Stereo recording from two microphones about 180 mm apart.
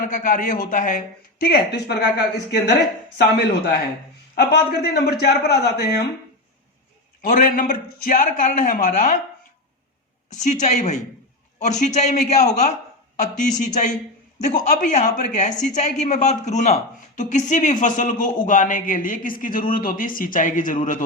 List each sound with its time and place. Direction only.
0.0 s a woman's voice: 50° left (ahead or behind); by 2.7 s 65° left (ahead or behind)
4.4 s a man's voice: 60° left (ahead or behind)
7.2 s a woman's voice: 50° left (ahead or behind)
10.4 s a man's voice: 40° left (ahead or behind)